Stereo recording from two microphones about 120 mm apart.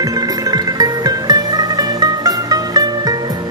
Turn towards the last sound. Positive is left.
turn(degrees=-35)  # may be behind; listen again after turning